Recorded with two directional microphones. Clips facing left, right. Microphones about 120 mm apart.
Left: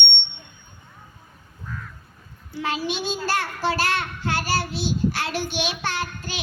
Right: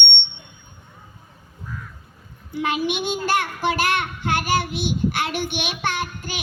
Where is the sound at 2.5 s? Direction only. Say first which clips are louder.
Right 3 dB; 55° right (ahead or behind).